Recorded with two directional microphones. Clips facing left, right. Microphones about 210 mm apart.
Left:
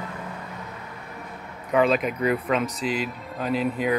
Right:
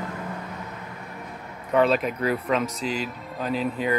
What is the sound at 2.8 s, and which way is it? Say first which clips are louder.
Speech: left 2 dB; 40° right (ahead or behind).